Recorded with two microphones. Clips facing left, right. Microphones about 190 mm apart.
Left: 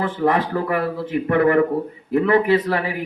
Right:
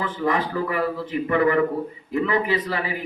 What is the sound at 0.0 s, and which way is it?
Speech, 65° left (ahead or behind).